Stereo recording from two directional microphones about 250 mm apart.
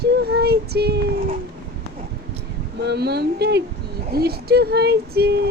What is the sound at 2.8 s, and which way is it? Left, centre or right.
Speech, right.